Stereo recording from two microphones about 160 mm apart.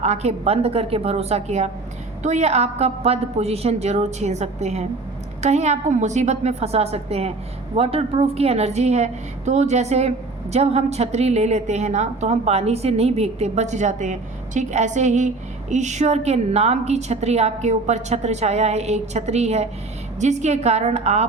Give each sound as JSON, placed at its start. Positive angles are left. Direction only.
{"t": 0.0, "sound": "a woman's voice", "side_deg": -45}